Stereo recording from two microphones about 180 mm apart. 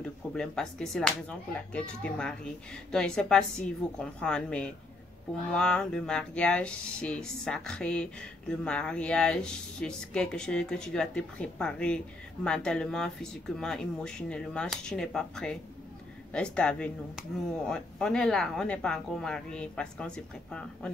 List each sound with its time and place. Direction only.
0.0 s speech: 5° left (ahead or behind)